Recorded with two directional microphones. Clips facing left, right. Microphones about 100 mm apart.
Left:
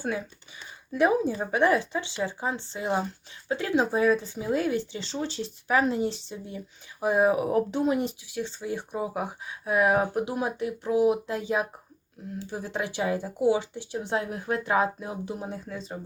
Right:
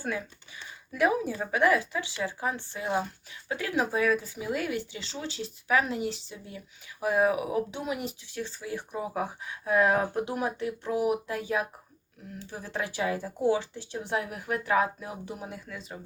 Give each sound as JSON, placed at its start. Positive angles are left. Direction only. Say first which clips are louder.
{"t": 0.0, "sound": "speech", "louder": "left 3 dB", "side_deg": 20}
{"t": 7.3, "sound": "speech", "louder": "left 5 dB", "side_deg": 40}
{"t": 8.3, "sound": "speech", "louder": "left 3 dB", "side_deg": 20}